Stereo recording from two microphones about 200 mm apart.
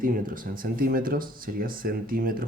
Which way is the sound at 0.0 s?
45° right (ahead or behind).